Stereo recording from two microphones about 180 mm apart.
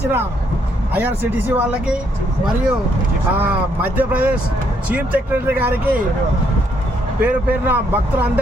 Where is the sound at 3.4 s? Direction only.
10° right (ahead or behind).